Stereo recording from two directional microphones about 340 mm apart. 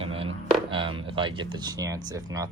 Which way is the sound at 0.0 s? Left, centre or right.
Centre.